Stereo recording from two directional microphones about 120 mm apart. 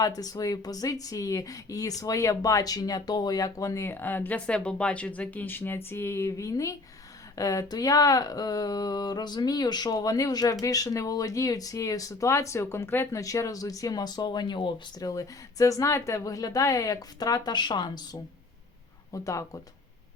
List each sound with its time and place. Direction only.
0.0 s speech: 30° left (ahead or behind)